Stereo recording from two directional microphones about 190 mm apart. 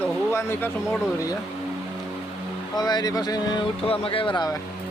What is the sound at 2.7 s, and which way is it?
Speech, 20° left (ahead or behind).